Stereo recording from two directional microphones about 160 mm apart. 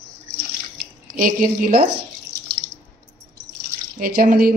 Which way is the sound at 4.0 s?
65° right (ahead or behind).